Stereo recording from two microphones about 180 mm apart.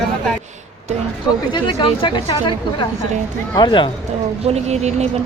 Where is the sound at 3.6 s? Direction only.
25° left (ahead or behind).